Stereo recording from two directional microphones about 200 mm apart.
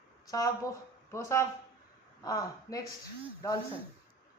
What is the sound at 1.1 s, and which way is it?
A woman's voice, 15° left (ahead or behind).